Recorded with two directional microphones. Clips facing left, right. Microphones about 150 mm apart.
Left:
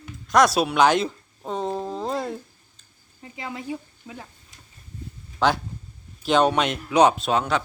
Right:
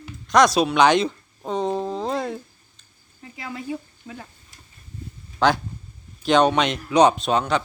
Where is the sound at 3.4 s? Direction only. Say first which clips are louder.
Right 1 dB; 20° left (ahead or behind).